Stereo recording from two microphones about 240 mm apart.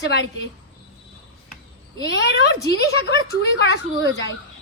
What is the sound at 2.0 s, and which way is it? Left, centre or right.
A woman's voice, left.